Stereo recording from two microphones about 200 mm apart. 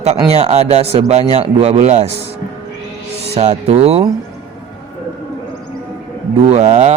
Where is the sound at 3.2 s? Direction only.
35° right (ahead or behind).